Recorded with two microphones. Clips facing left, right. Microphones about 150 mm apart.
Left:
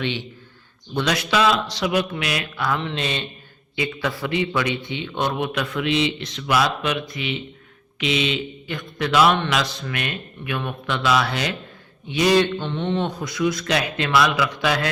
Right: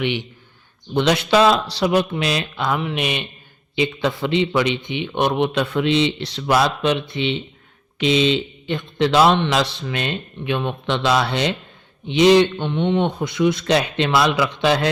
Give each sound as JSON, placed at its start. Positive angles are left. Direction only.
{"t": 0.0, "sound": "a man's voice", "side_deg": -15}
{"t": 0.9, "sound": "a man's voice", "side_deg": -25}